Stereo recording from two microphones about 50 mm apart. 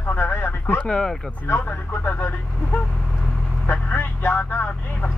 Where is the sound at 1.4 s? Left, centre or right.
Left.